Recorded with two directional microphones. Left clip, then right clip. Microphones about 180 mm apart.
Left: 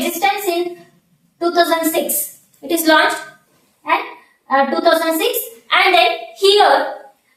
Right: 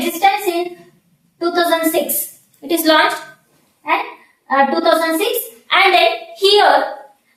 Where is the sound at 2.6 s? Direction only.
20° right (ahead or behind).